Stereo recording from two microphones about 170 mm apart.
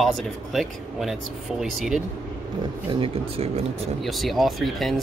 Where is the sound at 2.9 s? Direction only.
30° right (ahead or behind).